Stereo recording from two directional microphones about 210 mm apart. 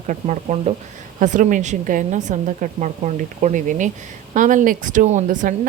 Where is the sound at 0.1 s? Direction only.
30° right (ahead or behind).